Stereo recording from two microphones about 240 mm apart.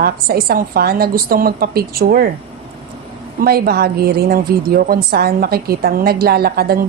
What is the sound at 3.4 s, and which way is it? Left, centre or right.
A woman's voice, right.